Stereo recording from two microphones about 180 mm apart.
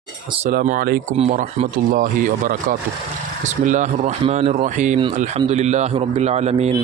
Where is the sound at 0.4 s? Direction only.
45° right (ahead or behind).